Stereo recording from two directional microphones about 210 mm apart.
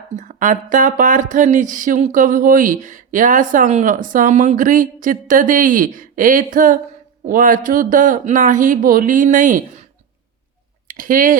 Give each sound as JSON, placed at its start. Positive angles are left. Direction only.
{"t": 0.2, "sound": "speech", "side_deg": -35}
{"t": 10.8, "sound": "speech", "side_deg": -40}